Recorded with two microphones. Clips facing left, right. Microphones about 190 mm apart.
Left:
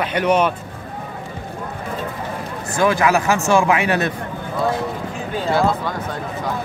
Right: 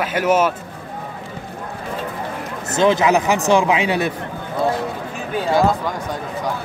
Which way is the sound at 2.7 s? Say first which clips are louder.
Right 2 dB; 20° right (ahead or behind).